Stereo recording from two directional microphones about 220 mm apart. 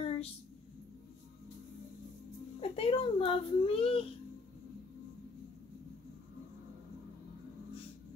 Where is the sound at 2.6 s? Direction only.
25° left (ahead or behind).